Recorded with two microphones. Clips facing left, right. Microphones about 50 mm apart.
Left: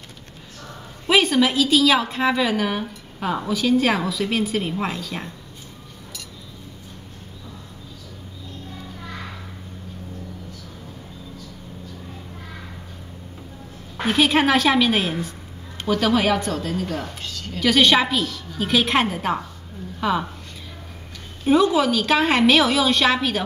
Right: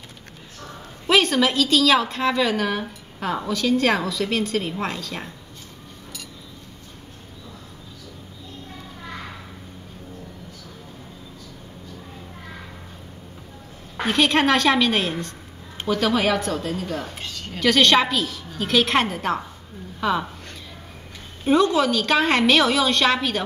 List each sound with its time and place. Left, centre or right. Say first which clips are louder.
1.0 s a woman's voice: left 1 dB; centre
14.0 s a woman's voice: left 1 dB; centre
17.1 s a sound: even; right
17.6 s a woman's voice: even; centre
21.5 s a woman's voice: left 1 dB; centre